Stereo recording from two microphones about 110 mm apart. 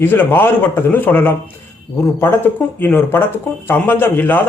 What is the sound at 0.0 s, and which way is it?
A man's voice, 20° left (ahead or behind).